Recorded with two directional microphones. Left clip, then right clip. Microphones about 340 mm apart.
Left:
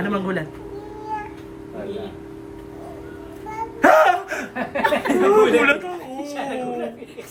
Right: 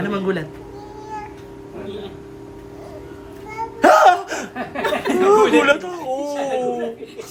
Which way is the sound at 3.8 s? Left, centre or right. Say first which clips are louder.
Right 3 dB; centre.